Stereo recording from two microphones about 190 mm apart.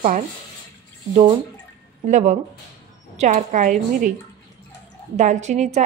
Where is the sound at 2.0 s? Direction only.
40° right (ahead or behind).